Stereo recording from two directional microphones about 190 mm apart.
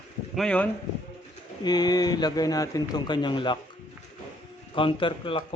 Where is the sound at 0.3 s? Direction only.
5° left (ahead or behind).